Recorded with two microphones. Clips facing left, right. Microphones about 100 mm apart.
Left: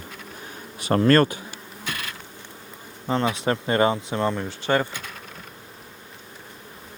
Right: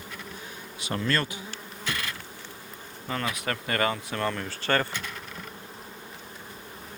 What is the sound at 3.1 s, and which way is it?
Speech, 25° left (ahead or behind).